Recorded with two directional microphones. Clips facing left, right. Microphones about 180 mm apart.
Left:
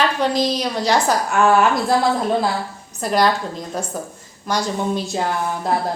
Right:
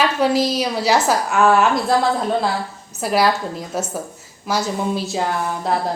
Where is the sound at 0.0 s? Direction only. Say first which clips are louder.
Right 1 dB; 5° right (ahead or behind).